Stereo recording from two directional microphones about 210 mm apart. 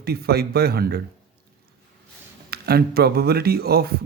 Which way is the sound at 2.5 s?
50° right (ahead or behind).